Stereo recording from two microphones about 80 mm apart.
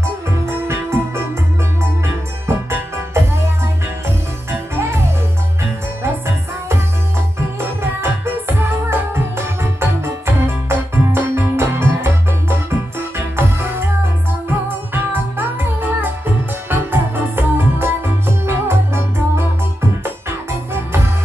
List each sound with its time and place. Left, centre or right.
0.5 s music: right
4.5 s music: right
7.8 s music: right
15.0 s music: right